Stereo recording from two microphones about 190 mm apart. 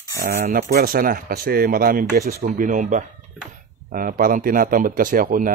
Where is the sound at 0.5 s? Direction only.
50° right (ahead or behind).